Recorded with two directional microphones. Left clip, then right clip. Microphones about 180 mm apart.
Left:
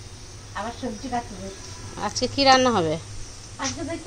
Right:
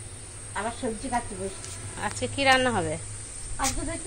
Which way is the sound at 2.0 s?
35° left (ahead or behind).